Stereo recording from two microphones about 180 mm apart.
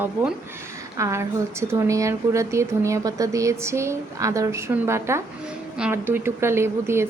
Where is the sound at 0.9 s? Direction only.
15° right (ahead or behind).